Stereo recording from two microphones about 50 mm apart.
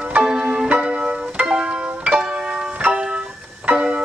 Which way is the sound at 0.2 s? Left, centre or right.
Centre.